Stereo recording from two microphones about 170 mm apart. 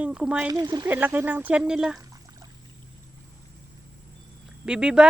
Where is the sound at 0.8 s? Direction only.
10° right (ahead or behind).